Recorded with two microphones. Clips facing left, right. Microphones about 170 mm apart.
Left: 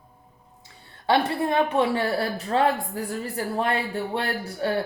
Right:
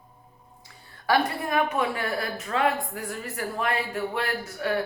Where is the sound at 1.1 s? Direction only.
25° left (ahead or behind).